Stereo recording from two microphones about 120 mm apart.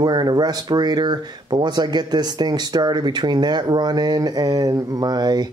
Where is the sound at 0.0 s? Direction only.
35° right (ahead or behind).